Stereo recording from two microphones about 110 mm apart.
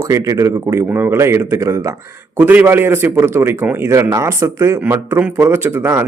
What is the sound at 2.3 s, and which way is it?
Speech, 15° right (ahead or behind).